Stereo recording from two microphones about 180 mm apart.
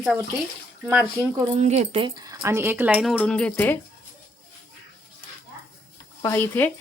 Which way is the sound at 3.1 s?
5° left (ahead or behind).